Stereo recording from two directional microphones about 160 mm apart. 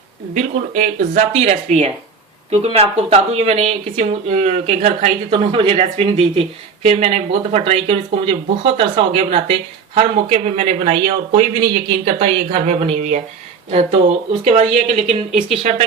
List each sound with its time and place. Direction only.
0.3 s speech: 45° right (ahead or behind)
14.4 s speech: 40° right (ahead or behind)